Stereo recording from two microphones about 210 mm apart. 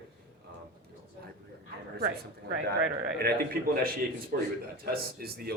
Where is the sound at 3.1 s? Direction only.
45° right (ahead or behind).